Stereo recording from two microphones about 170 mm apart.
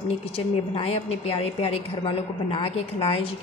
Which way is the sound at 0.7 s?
35° left (ahead or behind).